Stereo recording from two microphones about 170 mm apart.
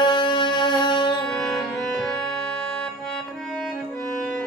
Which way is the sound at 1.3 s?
Centre (ahead or behind).